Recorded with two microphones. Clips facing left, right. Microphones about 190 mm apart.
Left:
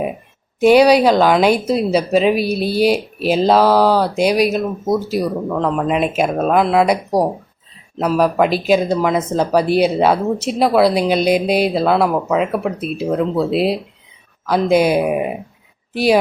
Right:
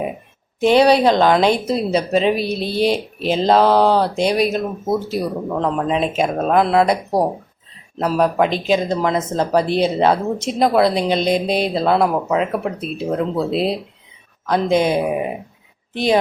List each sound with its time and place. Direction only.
0.8 s speech: 25° right (ahead or behind)
1.0 s speech: 5° left (ahead or behind)
7.9 s speech: 5° left (ahead or behind)